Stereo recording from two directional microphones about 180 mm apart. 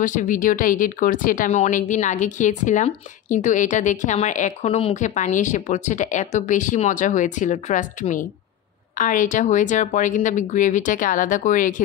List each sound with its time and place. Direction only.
0.0 s speech: 45° left (ahead or behind)